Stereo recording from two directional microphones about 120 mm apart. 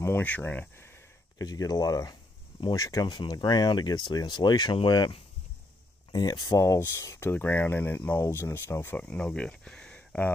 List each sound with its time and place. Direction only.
0.0 s a sound: 15° left (ahead or behind)
1.5 s speech: 30° left (ahead or behind)
9.0 s speech: 5° left (ahead or behind)